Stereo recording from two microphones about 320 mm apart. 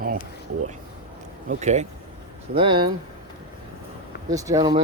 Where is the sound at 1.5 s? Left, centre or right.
Right.